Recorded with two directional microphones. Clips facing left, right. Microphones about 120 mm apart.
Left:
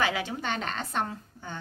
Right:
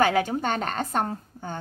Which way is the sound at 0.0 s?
45° right (ahead or behind).